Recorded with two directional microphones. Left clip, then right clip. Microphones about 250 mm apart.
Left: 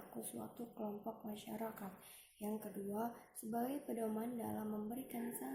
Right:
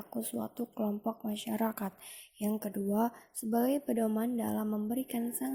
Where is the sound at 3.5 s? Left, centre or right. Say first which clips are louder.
Right 12 dB; right.